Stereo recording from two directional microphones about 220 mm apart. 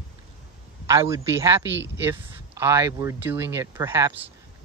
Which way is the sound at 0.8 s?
15° right (ahead or behind).